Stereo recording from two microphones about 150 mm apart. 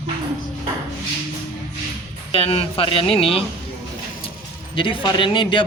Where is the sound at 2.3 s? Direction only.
40° left (ahead or behind).